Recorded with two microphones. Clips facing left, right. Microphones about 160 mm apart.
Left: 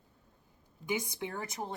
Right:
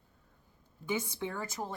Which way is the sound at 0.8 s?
15° left (ahead or behind).